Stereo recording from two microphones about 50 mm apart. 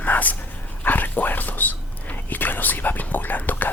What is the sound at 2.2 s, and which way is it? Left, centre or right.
Whispering, left.